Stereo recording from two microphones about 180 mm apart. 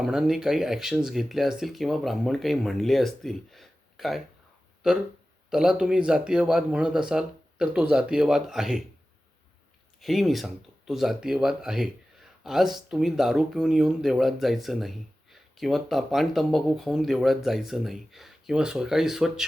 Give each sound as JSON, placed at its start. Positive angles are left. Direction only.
{"t": 0.0, "sound": "speech", "side_deg": 0}
{"t": 10.0, "sound": "speech", "side_deg": 0}